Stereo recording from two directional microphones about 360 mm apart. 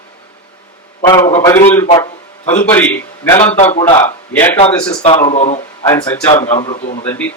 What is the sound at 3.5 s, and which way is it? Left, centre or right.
A man's voice, centre.